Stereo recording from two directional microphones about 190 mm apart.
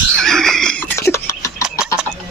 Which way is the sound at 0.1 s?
Centre (ahead or behind).